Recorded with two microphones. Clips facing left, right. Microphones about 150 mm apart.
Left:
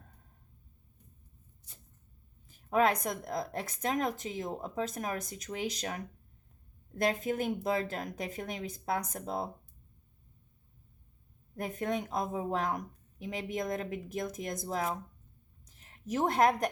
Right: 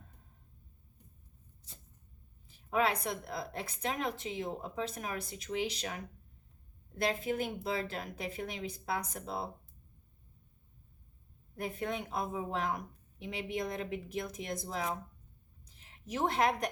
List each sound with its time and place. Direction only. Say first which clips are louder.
2.5 s a woman's voice: left 4 dB; 40° left (ahead or behind)
11.5 s a woman's voice: left 3 dB; 45° left (ahead or behind)
15.6 s a sound: left 6 dB; 45° left (ahead or behind)